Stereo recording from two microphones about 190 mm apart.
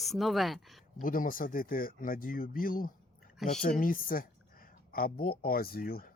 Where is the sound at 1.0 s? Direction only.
45° left (ahead or behind).